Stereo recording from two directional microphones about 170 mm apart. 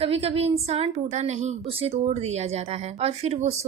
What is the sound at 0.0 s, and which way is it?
A woman's voice, 35° right (ahead or behind).